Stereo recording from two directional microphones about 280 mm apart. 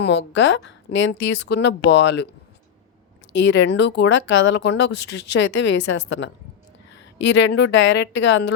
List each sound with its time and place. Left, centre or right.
0.0 s speech: left
3.3 s speech: left